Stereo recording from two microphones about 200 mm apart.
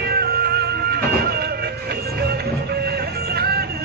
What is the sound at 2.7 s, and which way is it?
Music, 50° right (ahead or behind).